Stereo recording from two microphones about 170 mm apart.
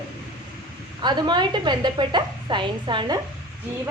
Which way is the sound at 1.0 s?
25° right (ahead or behind).